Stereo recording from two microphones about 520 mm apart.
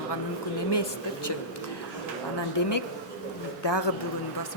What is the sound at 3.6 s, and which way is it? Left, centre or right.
Speech, left.